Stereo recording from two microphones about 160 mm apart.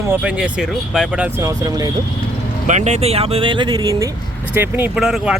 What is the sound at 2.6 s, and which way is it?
Speech, 45° right (ahead or behind).